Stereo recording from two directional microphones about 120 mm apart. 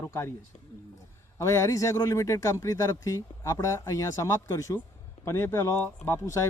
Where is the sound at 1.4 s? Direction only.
25° left (ahead or behind).